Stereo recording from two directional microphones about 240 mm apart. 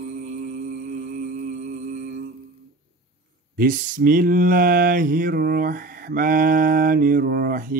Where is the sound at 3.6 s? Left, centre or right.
Right.